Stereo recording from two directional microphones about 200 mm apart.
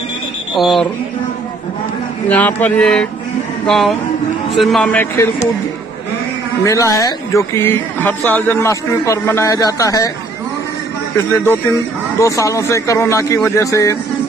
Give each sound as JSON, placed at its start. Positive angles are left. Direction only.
{"t": 0.6, "sound": "speech", "side_deg": 0}
{"t": 2.2, "sound": "speech", "side_deg": 10}
{"t": 6.6, "sound": "speech", "side_deg": 15}
{"t": 11.1, "sound": "speech", "side_deg": 10}